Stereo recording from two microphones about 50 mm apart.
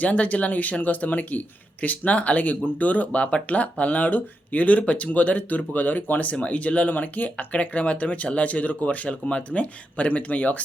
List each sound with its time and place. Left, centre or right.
0.0 s speech: left